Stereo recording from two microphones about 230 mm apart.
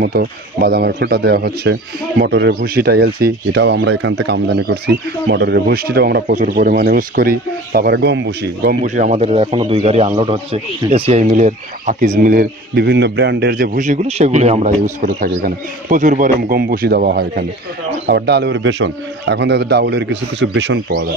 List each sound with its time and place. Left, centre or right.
0.0 s speech: right
8.8 s a man's voice: right
15.0 s a man's voice: right